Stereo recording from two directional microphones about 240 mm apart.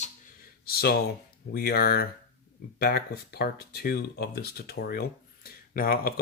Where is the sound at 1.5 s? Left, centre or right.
Left.